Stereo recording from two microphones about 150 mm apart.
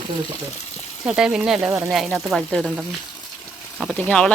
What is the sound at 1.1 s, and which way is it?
Speech, 5° right (ahead or behind).